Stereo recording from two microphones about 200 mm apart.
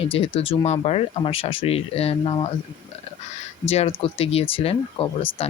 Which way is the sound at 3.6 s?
30° left (ahead or behind).